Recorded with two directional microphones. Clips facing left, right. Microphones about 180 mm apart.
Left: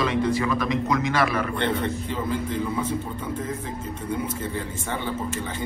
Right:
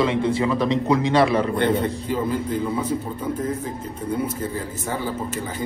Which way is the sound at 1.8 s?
10° right (ahead or behind).